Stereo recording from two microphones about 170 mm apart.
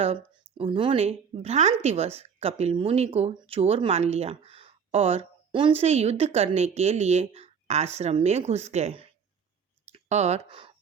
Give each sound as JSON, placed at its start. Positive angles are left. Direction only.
{"t": 0.0, "sound": "speech", "side_deg": -35}